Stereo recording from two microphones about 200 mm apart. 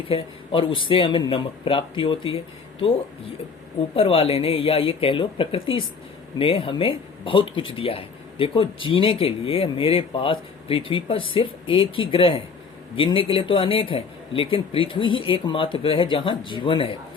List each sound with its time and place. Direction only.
0.1 s speech: 25° left (ahead or behind)
3.9 s speech: 25° left (ahead or behind)